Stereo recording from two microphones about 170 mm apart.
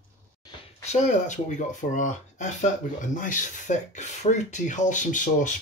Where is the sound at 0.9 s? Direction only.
40° left (ahead or behind).